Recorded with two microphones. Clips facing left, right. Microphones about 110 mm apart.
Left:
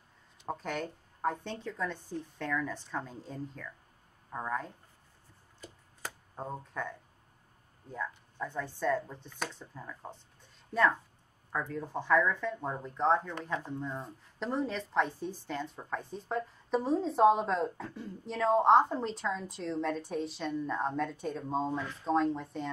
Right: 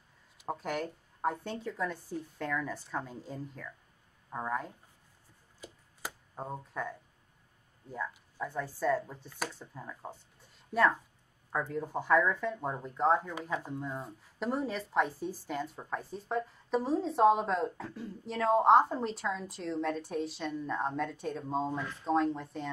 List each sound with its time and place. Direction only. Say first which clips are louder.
0.4 s a woman's voice: right 1 dB; 5° right (ahead or behind)
5.6 s a sound: right 1 dB; 5° right (ahead or behind)
7.9 s a woman's voice: even; 5° right (ahead or behind)
11.7 s speech: right 1 dB; 10° right (ahead or behind)